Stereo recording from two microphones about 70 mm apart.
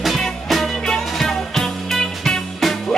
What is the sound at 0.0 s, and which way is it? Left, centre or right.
Music, centre.